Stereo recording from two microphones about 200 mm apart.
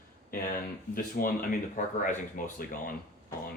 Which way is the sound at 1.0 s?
45° left (ahead or behind).